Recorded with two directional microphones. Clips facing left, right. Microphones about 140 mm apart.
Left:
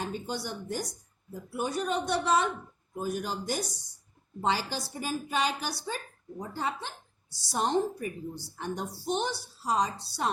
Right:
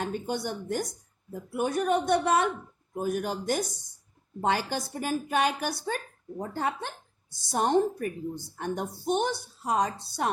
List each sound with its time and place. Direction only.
0.0 s a woman's voice: 55° right (ahead or behind)